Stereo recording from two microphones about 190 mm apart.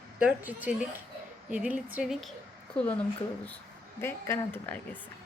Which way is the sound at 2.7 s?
5° left (ahead or behind).